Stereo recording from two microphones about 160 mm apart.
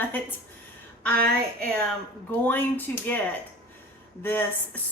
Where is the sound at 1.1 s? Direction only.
70° right (ahead or behind).